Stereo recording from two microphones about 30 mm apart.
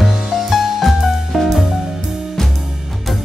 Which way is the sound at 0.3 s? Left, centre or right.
Centre.